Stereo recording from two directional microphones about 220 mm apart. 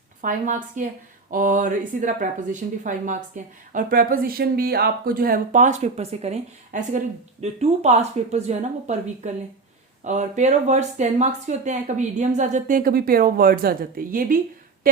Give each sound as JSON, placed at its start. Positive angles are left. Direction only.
{"t": 0.2, "sound": "speech", "side_deg": -35}